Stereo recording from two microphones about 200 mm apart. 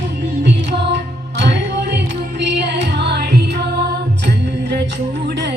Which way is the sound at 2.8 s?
55° right (ahead or behind).